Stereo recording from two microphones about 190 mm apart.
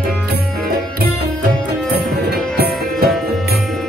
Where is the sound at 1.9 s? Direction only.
55° right (ahead or behind).